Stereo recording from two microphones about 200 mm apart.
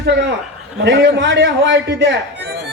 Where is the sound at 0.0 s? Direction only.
60° right (ahead or behind).